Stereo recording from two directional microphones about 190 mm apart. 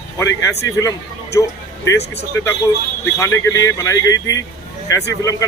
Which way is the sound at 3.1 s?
15° left (ahead or behind).